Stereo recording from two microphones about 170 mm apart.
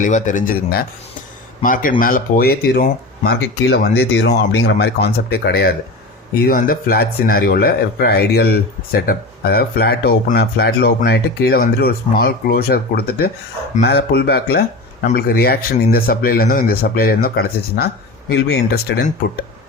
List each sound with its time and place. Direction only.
0.0 s speech: 50° left (ahead or behind); by 5.7 s 70° left (ahead or behind)
6.5 s speech: 55° left (ahead or behind)